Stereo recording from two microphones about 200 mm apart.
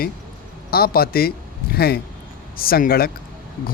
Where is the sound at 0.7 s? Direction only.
50° left (ahead or behind).